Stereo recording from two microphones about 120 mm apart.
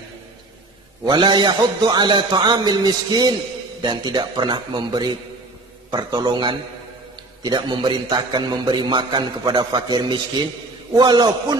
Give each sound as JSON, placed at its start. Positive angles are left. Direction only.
{"t": 1.0, "sound": "a man's voice", "side_deg": -40}